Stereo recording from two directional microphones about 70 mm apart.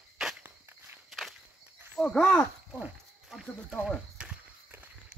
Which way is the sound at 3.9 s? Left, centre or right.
Centre.